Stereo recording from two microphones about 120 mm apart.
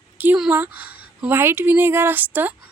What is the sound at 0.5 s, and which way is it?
A woman's voice, 15° right (ahead or behind).